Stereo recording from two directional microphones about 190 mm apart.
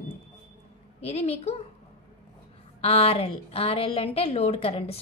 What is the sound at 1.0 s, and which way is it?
Speech, 35° left (ahead or behind).